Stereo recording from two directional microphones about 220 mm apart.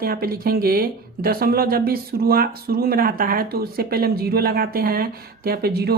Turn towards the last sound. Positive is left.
turn(degrees=-45)  # may be behind; listen again after turning